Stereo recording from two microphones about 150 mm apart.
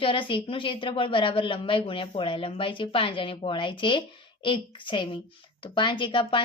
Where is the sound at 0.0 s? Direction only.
35° left (ahead or behind).